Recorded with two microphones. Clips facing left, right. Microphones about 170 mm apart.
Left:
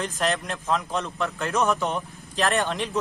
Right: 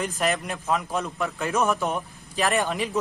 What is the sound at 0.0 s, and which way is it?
A man's voice, 10° right (ahead or behind).